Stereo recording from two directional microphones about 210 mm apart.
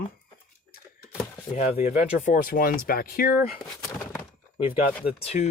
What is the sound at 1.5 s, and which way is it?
Speech, 35° left (ahead or behind).